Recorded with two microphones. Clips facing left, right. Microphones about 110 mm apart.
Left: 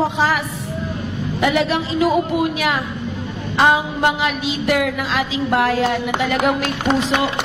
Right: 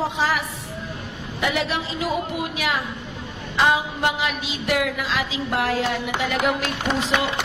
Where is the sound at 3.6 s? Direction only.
55° left (ahead or behind).